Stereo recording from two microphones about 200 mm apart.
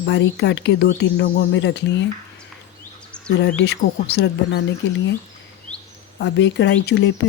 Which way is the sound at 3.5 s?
55° left (ahead or behind).